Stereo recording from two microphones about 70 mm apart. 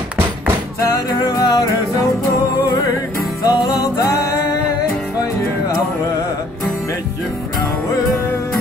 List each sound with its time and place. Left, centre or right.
0.9 s music: left
3.4 s music: left